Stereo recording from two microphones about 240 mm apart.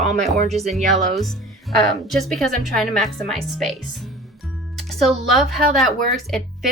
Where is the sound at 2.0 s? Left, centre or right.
Centre.